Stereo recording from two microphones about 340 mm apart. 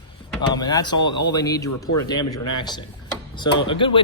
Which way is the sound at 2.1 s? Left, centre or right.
Left.